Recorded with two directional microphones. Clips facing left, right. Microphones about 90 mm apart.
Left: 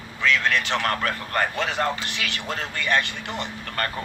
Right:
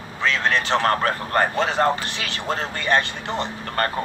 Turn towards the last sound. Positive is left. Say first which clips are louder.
# right 5 dB
turn(degrees=-35)  # may be behind; listen again after turning